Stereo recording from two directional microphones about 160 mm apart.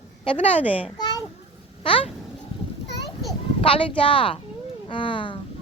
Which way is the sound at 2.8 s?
90° left.